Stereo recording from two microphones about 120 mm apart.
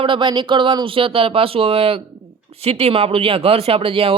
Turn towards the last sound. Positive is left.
turn(degrees=-50)  # may be behind; listen again after turning